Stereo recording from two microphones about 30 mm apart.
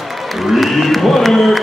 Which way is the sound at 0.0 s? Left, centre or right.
Centre.